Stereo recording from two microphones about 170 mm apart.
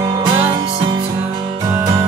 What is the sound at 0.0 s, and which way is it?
Music, 20° right (ahead or behind).